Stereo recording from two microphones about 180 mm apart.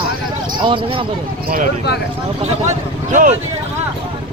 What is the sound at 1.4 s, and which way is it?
Speech, 55° right (ahead or behind).